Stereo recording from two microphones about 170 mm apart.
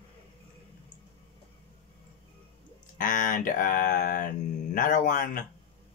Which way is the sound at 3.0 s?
50° left (ahead or behind).